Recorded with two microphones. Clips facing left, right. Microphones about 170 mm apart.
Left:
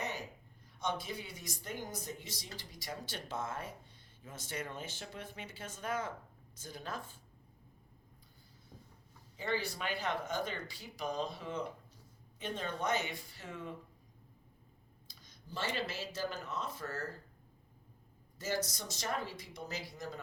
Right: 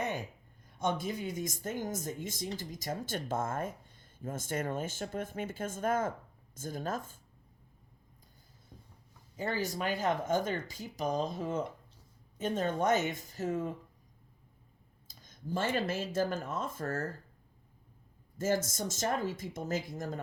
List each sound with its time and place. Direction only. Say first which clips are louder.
0.8 s speech: right 5 dB; 50° right (ahead or behind)
9.4 s speech: right 4 dB; 45° right (ahead or behind)
15.0 s speech: right 15 dB; 50° right (ahead or behind)
18.3 s speech: right 6 dB; 50° right (ahead or behind)